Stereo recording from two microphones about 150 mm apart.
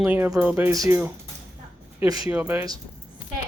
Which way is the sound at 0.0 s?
15° right (ahead or behind).